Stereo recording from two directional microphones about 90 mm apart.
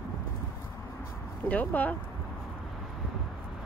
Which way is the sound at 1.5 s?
20° left (ahead or behind).